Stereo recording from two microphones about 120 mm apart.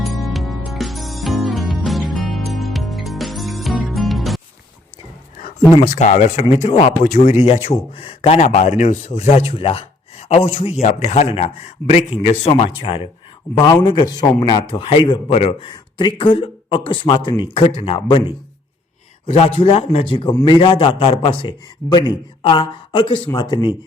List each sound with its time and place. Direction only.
0.0 s music: centre (ahead or behind)
6.0 s speech: 80° left
6.5 s speech: 60° left (ahead or behind); by 7.3 s 90° left
7.4 s a man's voice: 55° left (ahead or behind)
12.5 s speech: 50° left (ahead or behind)
13.8 s a man's voice: 40° left (ahead or behind)
15.4 s a man's voice: 60° left (ahead or behind)
15.7 s speech: 40° left (ahead or behind)